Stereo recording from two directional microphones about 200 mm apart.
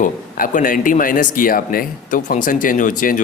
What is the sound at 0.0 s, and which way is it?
A man's voice, 40° left (ahead or behind).